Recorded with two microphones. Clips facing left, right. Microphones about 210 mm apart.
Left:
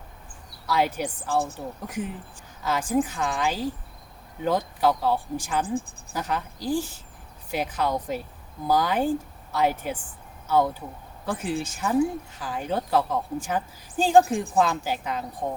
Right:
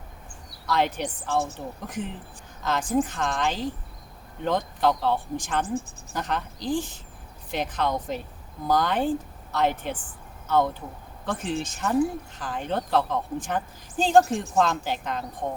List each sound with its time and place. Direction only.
0.7 s a woman's voice: 10° left (ahead or behind)